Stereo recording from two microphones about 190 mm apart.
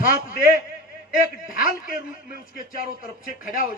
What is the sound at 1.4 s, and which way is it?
A man's voice, 50° left (ahead or behind).